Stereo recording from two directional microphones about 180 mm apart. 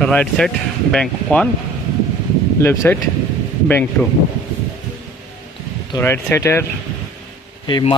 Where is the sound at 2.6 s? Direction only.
10° left (ahead or behind).